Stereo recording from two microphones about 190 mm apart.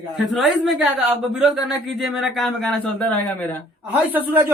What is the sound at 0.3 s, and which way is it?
Speech, 5° right (ahead or behind).